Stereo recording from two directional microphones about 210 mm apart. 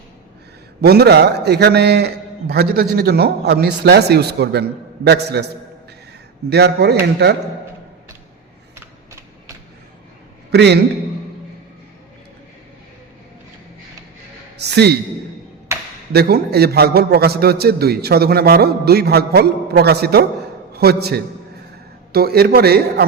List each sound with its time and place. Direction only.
0.8 s a man's voice: 50° right (ahead or behind)
6.5 s a man's voice: 50° right (ahead or behind)
10.5 s a man's voice: 55° right (ahead or behind)
14.6 s a man's voice: 50° right (ahead or behind)
16.1 s a man's voice: 50° right (ahead or behind)